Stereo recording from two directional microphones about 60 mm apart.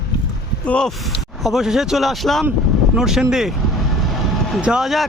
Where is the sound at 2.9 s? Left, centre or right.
Centre.